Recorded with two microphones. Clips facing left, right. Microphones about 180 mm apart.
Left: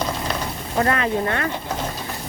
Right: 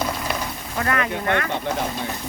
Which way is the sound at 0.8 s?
30° left (ahead or behind).